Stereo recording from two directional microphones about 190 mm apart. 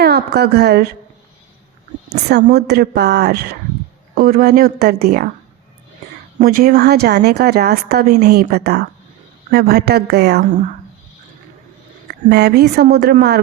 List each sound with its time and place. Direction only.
0.0 s a woman's voice: 60° right (ahead or behind)
2.3 s a woman's voice: 60° right (ahead or behind)
6.4 s a woman's voice: 50° right (ahead or behind)
12.0 s a woman's voice: 60° right (ahead or behind)